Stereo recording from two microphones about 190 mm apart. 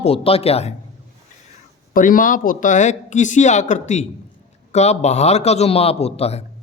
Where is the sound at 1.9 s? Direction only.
45° left (ahead or behind).